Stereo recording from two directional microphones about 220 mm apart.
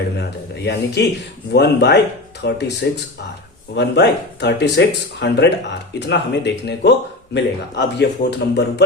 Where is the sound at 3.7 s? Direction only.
50° left (ahead or behind).